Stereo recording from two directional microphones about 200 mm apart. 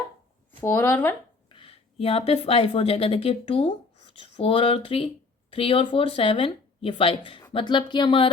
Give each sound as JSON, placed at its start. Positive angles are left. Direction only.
{"t": 0.6, "sound": "speech", "side_deg": 10}
{"t": 1.5, "sound": "speech", "side_deg": 25}